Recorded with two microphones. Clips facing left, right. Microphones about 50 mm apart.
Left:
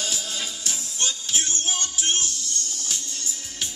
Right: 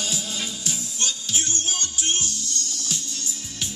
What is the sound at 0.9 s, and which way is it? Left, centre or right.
Music, left.